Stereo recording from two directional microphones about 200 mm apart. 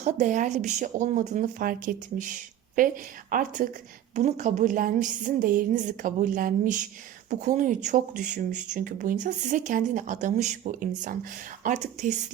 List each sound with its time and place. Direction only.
0.0 s speech: 40° right (ahead or behind)